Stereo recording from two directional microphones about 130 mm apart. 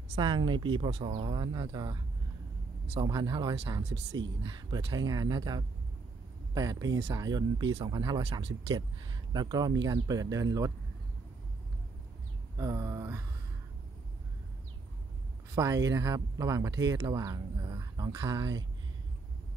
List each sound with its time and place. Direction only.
0.1 s speech: 35° right (ahead or behind)
3.0 s speech: 30° right (ahead or behind)
8.2 s speech: 45° right (ahead or behind)
9.3 s speech: 30° right (ahead or behind)
12.5 s a sound: 25° right (ahead or behind)
15.5 s speech: 25° right (ahead or behind)